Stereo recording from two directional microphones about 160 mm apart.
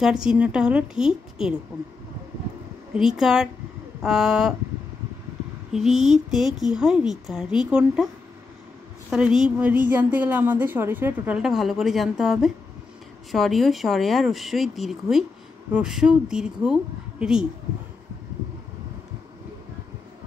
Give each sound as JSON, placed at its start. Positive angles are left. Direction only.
{"t": 0.0, "sound": "a woman's voice", "side_deg": -5}
{"t": 2.9, "sound": "a woman's voice", "side_deg": -5}
{"t": 5.7, "sound": "a woman's voice", "side_deg": -5}
{"t": 9.1, "sound": "a woman's voice", "side_deg": -5}